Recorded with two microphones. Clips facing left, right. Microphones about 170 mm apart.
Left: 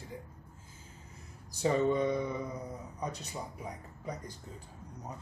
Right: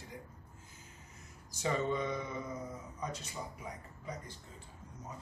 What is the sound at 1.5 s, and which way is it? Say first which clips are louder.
Speech: left 6 dB; 35° left (ahead or behind).